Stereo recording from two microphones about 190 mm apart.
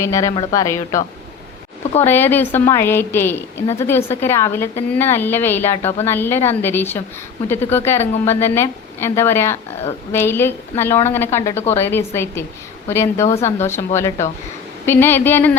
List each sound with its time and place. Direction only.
0.0 s a woman's voice: 15° left (ahead or behind)
2.0 s a woman's voice: 10° left (ahead or behind)